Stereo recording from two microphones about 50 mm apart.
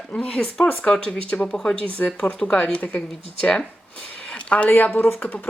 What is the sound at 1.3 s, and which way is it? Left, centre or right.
Speech, left.